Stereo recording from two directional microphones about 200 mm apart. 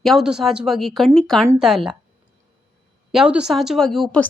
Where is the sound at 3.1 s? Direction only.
5° right (ahead or behind).